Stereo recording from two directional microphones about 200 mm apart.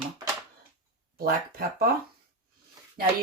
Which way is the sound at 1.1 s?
50° right (ahead or behind).